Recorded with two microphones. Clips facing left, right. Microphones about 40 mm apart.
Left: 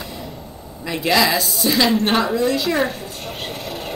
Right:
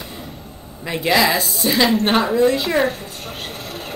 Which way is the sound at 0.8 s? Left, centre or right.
Centre.